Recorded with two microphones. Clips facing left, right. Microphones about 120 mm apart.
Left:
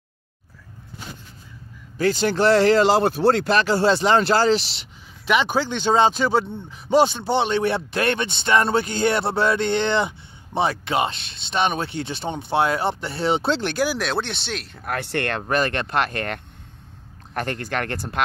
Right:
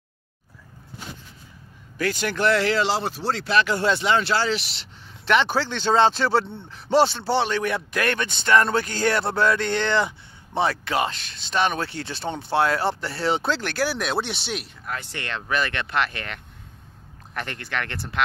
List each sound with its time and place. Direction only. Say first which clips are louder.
2.0 s speech: left 5 dB; 30° left (ahead or behind)
5.2 s speech: left 1 dB; 10° left (ahead or behind)
14.0 s speech: left 1 dB; 5° right (ahead or behind)
14.9 s speech: left 7 dB; 60° left (ahead or behind); by 18.2 s 45° left (ahead or behind)